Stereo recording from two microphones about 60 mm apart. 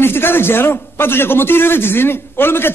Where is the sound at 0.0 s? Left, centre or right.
Left.